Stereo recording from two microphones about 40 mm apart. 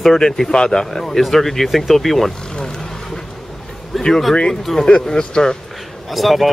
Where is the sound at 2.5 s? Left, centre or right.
Centre.